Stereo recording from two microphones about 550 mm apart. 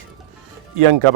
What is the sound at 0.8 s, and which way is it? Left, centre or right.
Speech, right.